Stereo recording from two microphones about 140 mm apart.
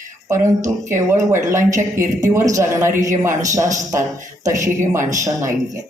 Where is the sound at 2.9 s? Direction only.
65° right (ahead or behind).